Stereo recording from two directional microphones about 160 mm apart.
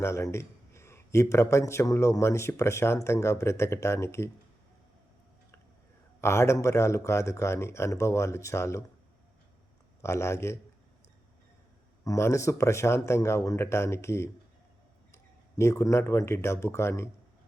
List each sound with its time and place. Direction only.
0.0 s a man's voice: 15° left (ahead or behind)
6.2 s a man's voice: 15° left (ahead or behind)
10.0 s a man's voice: 15° left (ahead or behind)
12.0 s a man's voice: 20° left (ahead or behind)